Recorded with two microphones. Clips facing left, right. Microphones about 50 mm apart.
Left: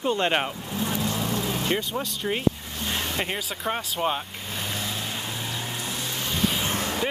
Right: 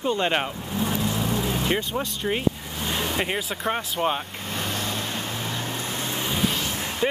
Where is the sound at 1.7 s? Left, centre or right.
Centre.